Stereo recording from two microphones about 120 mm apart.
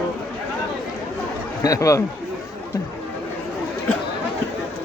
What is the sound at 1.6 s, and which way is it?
Speech, 30° left (ahead or behind).